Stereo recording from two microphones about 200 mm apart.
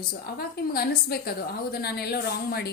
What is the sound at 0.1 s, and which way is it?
A woman's voice, 50° left (ahead or behind).